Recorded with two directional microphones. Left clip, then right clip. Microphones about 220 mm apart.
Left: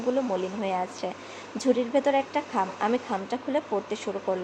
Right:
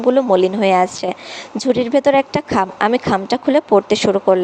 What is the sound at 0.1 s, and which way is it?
A woman's voice, 40° right (ahead or behind).